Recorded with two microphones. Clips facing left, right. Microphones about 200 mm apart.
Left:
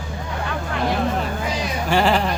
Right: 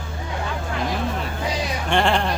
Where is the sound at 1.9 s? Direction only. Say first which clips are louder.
Left 2 dB; 5° left (ahead or behind).